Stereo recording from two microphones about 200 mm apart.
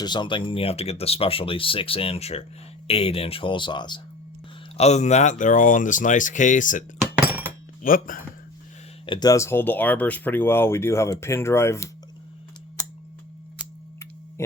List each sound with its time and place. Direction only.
0.0 s speech: 20° left (ahead or behind)
4.8 s speech: 35° left (ahead or behind)
9.0 s speech: 20° left (ahead or behind)